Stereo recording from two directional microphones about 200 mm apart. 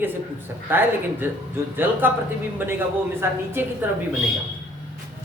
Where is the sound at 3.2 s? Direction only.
10° right (ahead or behind).